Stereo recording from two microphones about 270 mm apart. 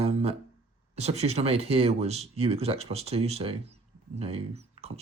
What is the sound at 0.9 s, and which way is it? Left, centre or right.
Speech, right.